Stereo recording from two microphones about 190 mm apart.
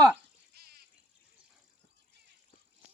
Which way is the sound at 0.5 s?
55° right (ahead or behind).